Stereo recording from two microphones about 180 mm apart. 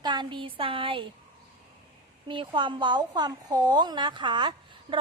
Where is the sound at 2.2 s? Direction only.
25° right (ahead or behind).